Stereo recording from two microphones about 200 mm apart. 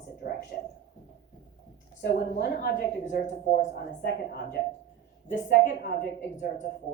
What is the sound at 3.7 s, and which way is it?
Speech, 55° left (ahead or behind).